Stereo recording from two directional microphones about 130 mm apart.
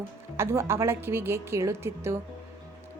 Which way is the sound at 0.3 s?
20° right (ahead or behind).